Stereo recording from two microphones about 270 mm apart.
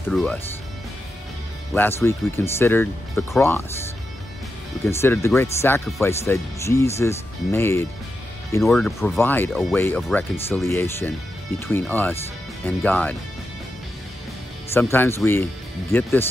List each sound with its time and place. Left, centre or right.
0.1 s speech: centre
1.7 s speech: centre
4.8 s speech: centre
14.7 s speech: centre